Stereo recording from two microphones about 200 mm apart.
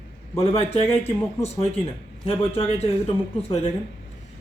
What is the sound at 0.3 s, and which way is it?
Speech, 30° left (ahead or behind).